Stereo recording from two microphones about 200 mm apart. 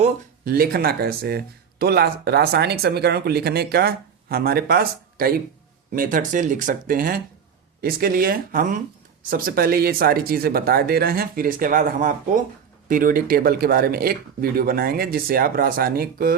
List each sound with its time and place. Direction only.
0.4 s speech: 50° right (ahead or behind)